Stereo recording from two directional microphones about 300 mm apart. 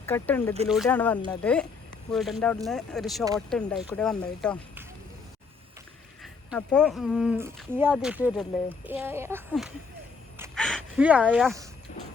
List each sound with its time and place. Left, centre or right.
0.0 s speech: centre
6.2 s speech: centre
10.3 s a sound: centre
11.9 s music: left